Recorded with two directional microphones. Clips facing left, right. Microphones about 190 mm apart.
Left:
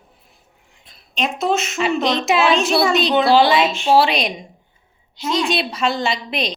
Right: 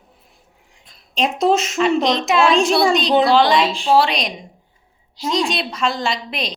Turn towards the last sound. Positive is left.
turn(degrees=0)  # may be behind; listen again after turning